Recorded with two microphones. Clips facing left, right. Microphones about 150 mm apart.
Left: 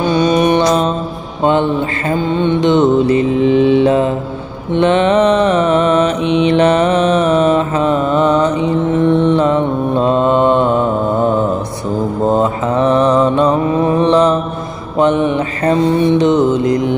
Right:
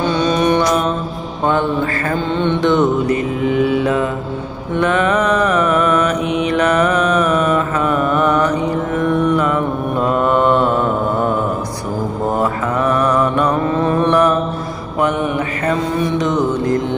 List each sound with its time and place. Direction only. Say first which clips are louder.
0.1 s music: left 5 dB; 15° left (ahead or behind)
1.4 s mantra: left 3 dB; 20° left (ahead or behind)
12.3 s mantra: left 4 dB; 25° left (ahead or behind)